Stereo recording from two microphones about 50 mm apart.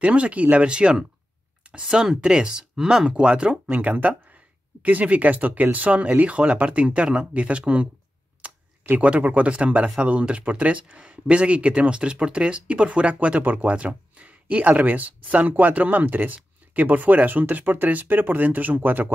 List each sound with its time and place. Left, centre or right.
0.0 s speech: right
3.6 s speech: right
8.4 s computer keyboard: right
9.0 s speech: right